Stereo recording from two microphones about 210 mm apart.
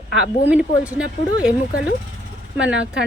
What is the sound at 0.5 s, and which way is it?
Speech, 5° right (ahead or behind).